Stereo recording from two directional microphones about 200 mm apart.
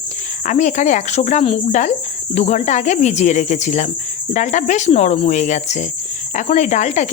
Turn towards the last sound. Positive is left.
turn(degrees=35)  # may be behind; listen again after turning